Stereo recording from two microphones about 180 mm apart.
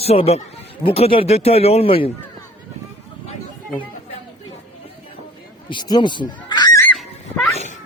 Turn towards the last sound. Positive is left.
turn(degrees=40)  # may be behind; listen again after turning